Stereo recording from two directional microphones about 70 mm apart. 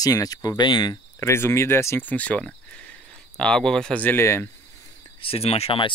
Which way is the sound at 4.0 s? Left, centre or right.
Left.